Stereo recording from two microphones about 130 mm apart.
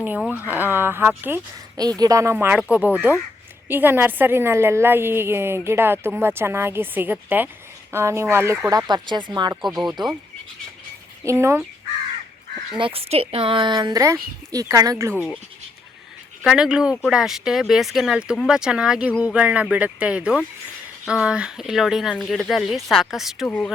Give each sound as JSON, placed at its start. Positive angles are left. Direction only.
{"t": 0.3, "sound": "a woman's voice", "side_deg": -15}
{"t": 1.7, "sound": "speech", "side_deg": -30}
{"t": 2.3, "sound": "a woman's voice", "side_deg": -15}
{"t": 8.9, "sound": "a woman's voice", "side_deg": -35}
{"t": 9.6, "sound": "speech", "side_deg": 0}
{"t": 11.3, "sound": "speech", "side_deg": -20}
{"t": 12.7, "sound": "a woman's voice", "side_deg": -45}
{"t": 16.4, "sound": "a woman's voice", "side_deg": -5}